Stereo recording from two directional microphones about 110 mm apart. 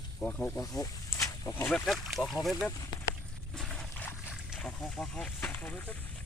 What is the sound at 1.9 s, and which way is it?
Speech, centre (ahead or behind).